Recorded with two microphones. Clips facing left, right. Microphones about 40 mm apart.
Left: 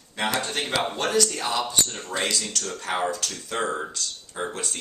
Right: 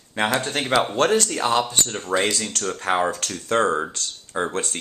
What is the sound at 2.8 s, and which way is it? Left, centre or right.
Speech, right.